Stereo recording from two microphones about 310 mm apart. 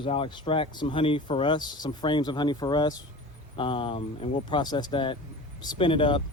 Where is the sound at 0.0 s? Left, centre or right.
Centre.